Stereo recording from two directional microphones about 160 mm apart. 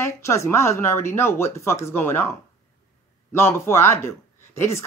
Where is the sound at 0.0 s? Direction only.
15° left (ahead or behind).